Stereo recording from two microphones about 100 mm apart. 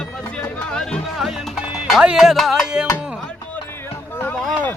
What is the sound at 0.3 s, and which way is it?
Music, 5° left (ahead or behind).